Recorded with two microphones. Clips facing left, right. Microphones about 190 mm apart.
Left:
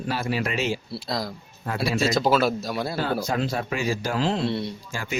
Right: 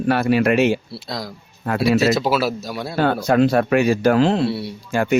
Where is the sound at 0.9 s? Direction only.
Centre (ahead or behind).